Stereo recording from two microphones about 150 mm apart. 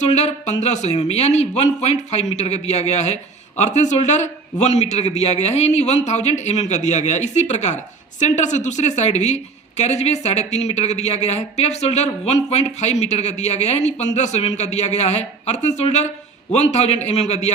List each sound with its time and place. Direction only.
0.0 s a woman's voice: 50° left (ahead or behind)